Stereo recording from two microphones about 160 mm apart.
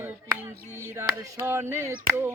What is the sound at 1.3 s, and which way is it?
Music, 15° right (ahead or behind).